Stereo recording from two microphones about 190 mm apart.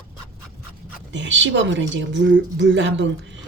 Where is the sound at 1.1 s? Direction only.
70° right (ahead or behind).